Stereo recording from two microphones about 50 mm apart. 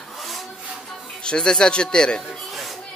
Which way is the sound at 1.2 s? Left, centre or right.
Centre.